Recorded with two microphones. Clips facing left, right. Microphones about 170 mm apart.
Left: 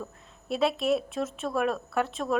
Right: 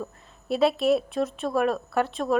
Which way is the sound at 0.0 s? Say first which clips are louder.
Right 4 dB; centre (ahead or behind).